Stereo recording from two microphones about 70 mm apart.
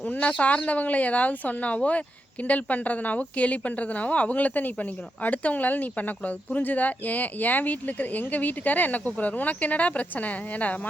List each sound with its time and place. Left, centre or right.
0.0 s speech: centre